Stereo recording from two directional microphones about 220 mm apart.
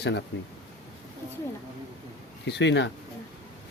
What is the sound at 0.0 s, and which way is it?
Speech, 50° left (ahead or behind).